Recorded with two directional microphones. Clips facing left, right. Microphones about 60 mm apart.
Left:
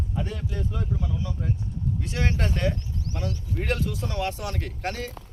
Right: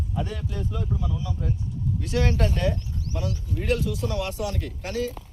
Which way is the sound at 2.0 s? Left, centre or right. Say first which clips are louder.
Right 5 dB; left.